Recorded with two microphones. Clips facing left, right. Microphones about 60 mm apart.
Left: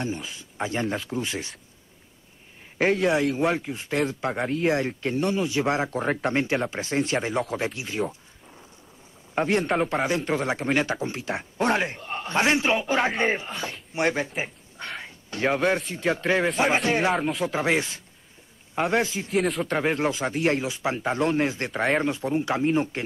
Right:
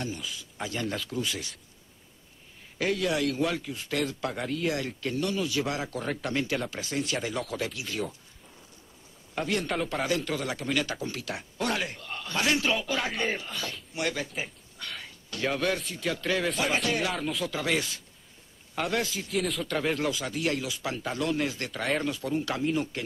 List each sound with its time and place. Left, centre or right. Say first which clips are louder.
0.0 s speech: left 4 dB; left
2.8 s speech: left 6 dB; left
9.3 s a man's voice: left 6 dB; left
19.6 s speech: left 4 dB; left